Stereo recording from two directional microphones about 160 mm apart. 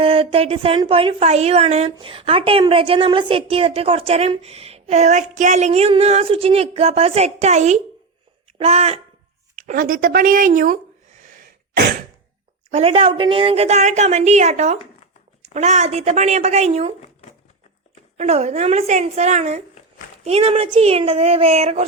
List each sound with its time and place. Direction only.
0.0 s a woman's voice: 35° right (ahead or behind)
9.6 s a woman's voice: 55° right (ahead or behind)
12.7 s a woman's voice: 40° right (ahead or behind)
18.2 s a woman's voice: 40° right (ahead or behind)